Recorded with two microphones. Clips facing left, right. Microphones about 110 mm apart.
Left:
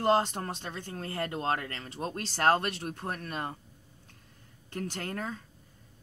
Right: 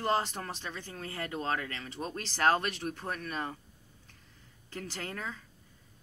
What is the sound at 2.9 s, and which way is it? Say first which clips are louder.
Speech: even; 40° left (ahead or behind).